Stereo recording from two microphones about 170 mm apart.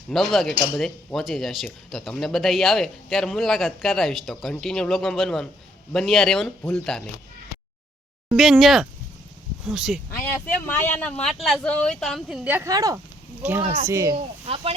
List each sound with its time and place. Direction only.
0.1 s speech: centre (ahead or behind)
8.3 s speech: centre (ahead or behind)
10.2 s speech: 15° left (ahead or behind)
12.5 s speech: 15° right (ahead or behind)
13.4 s speech: 10° right (ahead or behind)
14.4 s speech: 35° right (ahead or behind)